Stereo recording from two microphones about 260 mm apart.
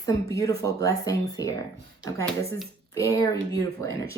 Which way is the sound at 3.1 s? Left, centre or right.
Centre.